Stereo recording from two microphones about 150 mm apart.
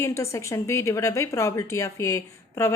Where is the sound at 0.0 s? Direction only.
20° left (ahead or behind).